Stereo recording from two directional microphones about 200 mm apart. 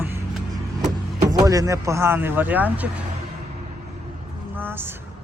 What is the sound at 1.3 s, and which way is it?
Speech, 15° right (ahead or behind).